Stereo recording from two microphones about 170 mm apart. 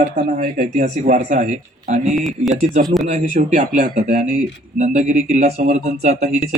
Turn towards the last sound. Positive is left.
turn(degrees=-40)  # may be behind; listen again after turning